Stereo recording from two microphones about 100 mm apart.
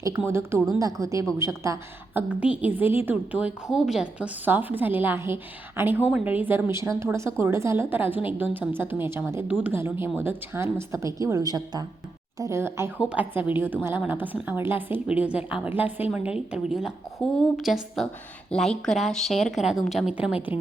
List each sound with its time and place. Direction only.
0.3 s a woman's voice: 25° right (ahead or behind)
2.1 s a woman's voice: 15° right (ahead or behind); by 11.9 s 40° right (ahead or behind)
12.4 s a woman's voice: 25° right (ahead or behind)
13.0 s a woman's voice: 10° right (ahead or behind)
20.1 s a woman's voice: 15° right (ahead or behind)